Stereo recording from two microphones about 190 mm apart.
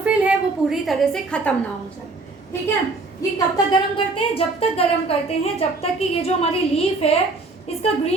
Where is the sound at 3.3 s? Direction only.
25° left (ahead or behind).